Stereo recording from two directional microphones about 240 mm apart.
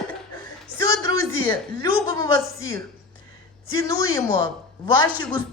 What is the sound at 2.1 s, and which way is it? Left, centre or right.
Speech, centre.